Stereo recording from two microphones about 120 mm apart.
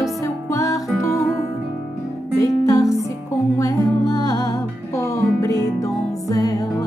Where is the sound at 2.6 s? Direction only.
30° left (ahead or behind).